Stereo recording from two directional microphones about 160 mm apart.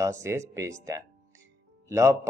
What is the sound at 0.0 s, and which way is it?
Speech, 20° right (ahead or behind).